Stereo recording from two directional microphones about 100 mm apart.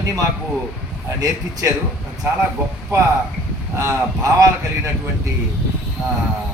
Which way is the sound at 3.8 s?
30° right (ahead or behind).